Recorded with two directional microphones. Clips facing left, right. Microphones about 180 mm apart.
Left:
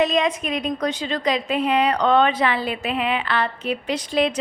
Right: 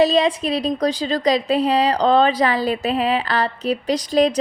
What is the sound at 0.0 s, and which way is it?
A woman's voice, 30° right (ahead or behind).